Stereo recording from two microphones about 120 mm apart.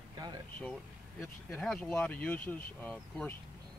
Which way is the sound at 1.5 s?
5° left (ahead or behind).